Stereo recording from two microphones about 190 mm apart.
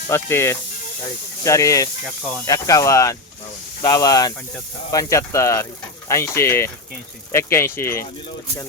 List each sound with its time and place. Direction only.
0.1 s speech: 15° left (ahead or behind)